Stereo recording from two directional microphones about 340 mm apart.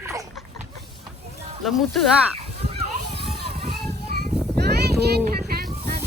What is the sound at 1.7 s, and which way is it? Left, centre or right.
Speech, centre.